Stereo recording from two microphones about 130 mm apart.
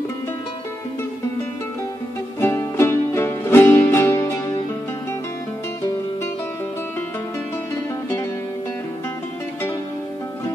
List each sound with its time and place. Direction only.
2.4 s music: 20° left (ahead or behind)